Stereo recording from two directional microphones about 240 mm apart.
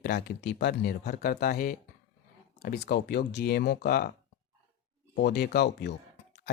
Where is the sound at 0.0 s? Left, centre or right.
Left.